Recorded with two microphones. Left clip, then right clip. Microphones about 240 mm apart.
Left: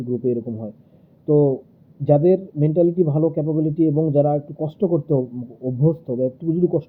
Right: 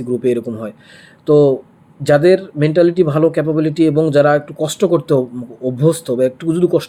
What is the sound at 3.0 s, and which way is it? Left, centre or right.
Speech, right.